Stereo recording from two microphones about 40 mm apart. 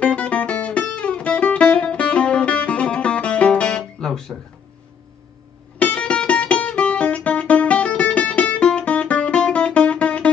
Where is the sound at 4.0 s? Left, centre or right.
Centre.